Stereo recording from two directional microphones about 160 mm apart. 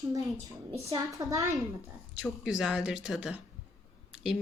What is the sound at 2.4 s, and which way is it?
Speech, 5° right (ahead or behind).